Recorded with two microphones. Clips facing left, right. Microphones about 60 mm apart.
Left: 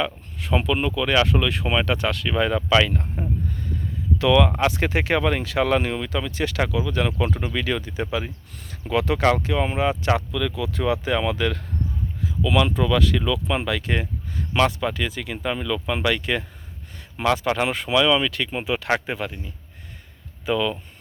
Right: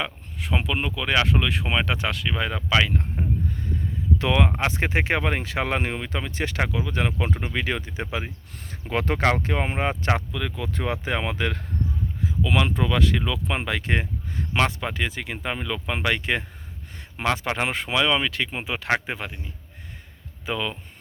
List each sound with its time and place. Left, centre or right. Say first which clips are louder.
0.0 s speech: left 4 dB; right
2.2 s speech: left 5 dB; centre
4.2 s speech: left 6 dB; right
8.9 s speech: left 3 dB; right
20.4 s speech: left 5 dB; centre